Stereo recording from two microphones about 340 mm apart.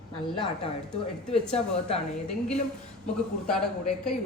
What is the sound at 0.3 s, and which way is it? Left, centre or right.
Speech, centre.